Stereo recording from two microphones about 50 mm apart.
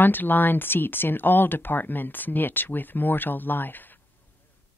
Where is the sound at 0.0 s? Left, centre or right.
Left.